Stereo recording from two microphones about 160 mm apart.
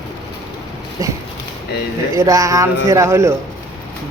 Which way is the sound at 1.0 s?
20° right (ahead or behind).